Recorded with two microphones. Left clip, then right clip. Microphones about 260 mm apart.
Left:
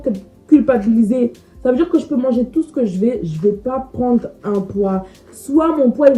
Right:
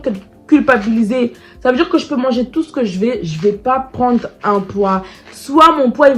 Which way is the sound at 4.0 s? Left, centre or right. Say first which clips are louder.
Right 3 dB; right.